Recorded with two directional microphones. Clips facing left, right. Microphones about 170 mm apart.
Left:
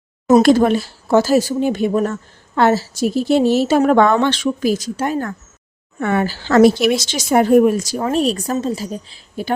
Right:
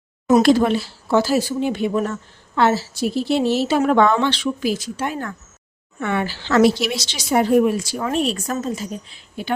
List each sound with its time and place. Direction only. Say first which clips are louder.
0.3 s a woman's voice: left 3 dB; 45° left (ahead or behind)